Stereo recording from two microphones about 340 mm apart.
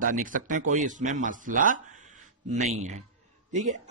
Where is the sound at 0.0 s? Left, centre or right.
Right.